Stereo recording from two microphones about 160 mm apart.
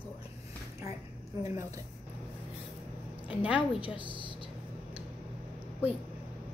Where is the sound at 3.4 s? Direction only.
10° right (ahead or behind).